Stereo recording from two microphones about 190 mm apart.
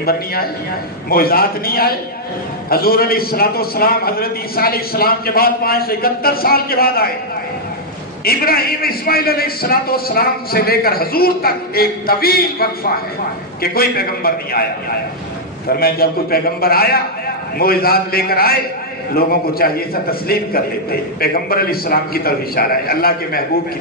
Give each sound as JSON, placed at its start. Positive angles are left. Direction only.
{"t": 0.0, "sound": "a man's voice", "side_deg": 50}
{"t": 8.2, "sound": "a man's voice", "side_deg": 55}
{"t": 15.7, "sound": "a man's voice", "side_deg": 55}